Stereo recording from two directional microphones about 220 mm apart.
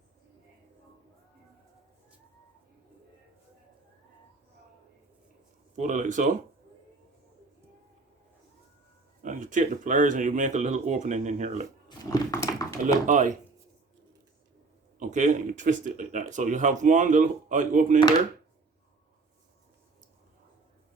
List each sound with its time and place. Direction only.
5.7 s speech: 35° right (ahead or behind)
9.2 s speech: 35° right (ahead or behind)
11.9 s a sound: 15° left (ahead or behind)
12.8 s speech: 35° right (ahead or behind)
14.9 s speech: 35° right (ahead or behind)